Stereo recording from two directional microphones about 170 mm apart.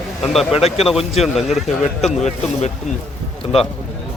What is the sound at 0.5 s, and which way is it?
Speech, 35° left (ahead or behind).